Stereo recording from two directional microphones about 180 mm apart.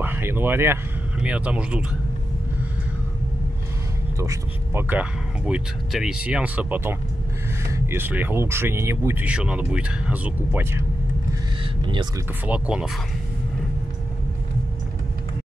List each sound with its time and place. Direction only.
0.0 s speech: 10° right (ahead or behind)
4.2 s speech: 15° right (ahead or behind)
11.8 s speech: 25° right (ahead or behind)
12.4 s speech: 5° right (ahead or behind)